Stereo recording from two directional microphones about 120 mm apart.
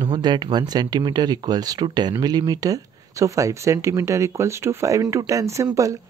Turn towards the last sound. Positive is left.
turn(degrees=-25)  # may be behind; listen again after turning